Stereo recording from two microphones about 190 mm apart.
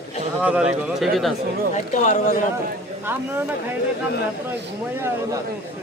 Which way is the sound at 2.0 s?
40° left (ahead or behind).